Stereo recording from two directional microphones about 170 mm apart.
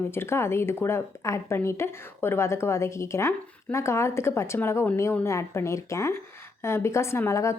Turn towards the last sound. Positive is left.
turn(degrees=15)  # may be behind; listen again after turning